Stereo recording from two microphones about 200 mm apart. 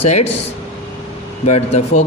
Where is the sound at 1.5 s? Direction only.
35° left (ahead or behind).